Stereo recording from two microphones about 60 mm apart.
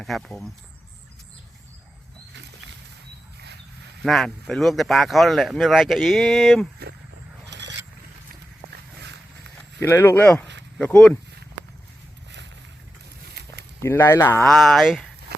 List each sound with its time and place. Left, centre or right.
0.0 s speech: centre
4.0 s speech: centre
9.8 s speech: left
10.2 s speech: centre
13.8 s speech: left
14.4 s speech: centre